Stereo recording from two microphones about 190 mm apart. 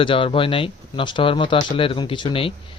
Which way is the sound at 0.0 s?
25° left (ahead or behind).